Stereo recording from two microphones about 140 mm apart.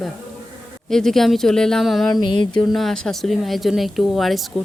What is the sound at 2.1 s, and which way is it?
Music, 30° left (ahead or behind).